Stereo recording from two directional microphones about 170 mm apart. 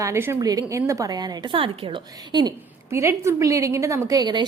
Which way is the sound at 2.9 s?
15° right (ahead or behind).